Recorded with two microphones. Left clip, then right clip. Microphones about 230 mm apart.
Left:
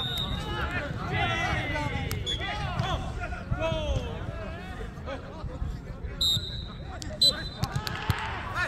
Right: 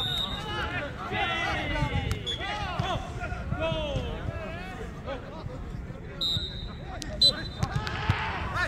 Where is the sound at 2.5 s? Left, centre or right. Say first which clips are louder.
Right 1 dB; right.